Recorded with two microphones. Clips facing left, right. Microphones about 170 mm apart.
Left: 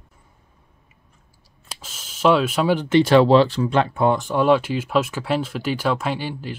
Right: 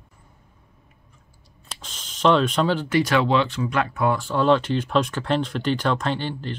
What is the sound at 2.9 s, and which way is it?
Speech, 25° left (ahead or behind).